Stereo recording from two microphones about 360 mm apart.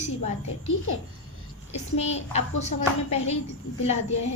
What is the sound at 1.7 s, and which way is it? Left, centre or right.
Speech, centre.